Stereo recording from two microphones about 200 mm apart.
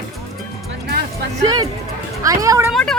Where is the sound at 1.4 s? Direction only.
20° right (ahead or behind).